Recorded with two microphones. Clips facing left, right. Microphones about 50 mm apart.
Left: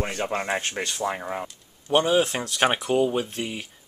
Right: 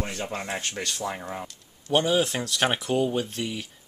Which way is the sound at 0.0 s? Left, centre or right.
Left.